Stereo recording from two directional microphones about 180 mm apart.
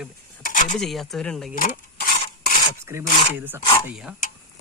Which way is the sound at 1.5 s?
50° left (ahead or behind).